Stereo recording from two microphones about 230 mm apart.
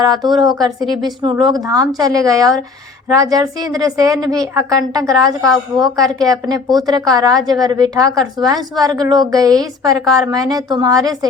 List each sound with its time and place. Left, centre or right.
0.2 s a woman's voice: centre